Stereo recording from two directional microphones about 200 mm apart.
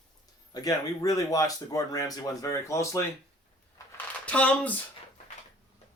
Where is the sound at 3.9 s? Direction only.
5° left (ahead or behind).